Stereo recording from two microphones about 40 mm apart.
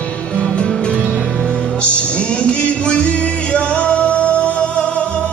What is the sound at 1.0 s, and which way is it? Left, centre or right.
Music, right.